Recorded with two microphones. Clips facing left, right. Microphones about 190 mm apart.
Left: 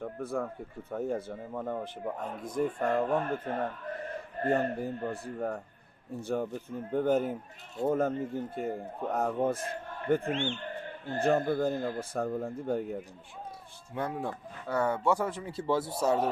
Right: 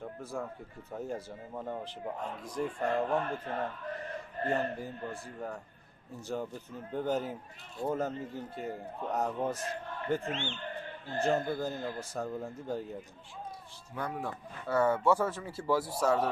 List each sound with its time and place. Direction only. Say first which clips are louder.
0.0 s a man's voice: left 5 dB; 55° left (ahead or behind)
13.9 s speech: left 3 dB; 25° left (ahead or behind)
14.7 s speech: right 1 dB; 15° left (ahead or behind)